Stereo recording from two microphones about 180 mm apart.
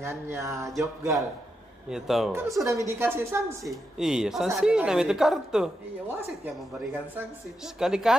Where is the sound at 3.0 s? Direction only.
15° right (ahead or behind).